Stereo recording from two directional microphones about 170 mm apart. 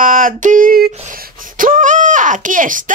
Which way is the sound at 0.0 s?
55° right (ahead or behind).